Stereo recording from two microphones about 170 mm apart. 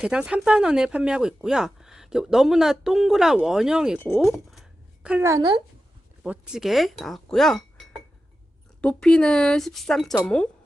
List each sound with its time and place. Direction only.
0.0 s speech: 5° right (ahead or behind)
5.2 s a woman's voice: 20° right (ahead or behind)
6.2 s speech: 5° right (ahead or behind)